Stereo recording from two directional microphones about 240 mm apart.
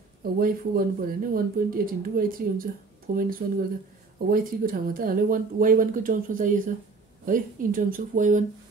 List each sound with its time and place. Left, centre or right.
0.2 s speech: right